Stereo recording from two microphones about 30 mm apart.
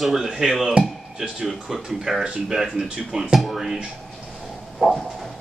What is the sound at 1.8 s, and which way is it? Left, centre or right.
Speech, centre.